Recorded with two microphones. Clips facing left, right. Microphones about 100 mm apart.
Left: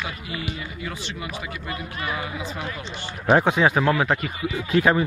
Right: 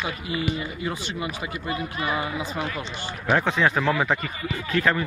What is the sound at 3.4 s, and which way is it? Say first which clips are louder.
Speech: left 3 dB; 10° left (ahead or behind).